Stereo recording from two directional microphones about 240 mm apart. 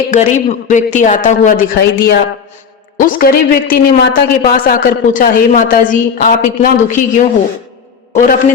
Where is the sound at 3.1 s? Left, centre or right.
Left.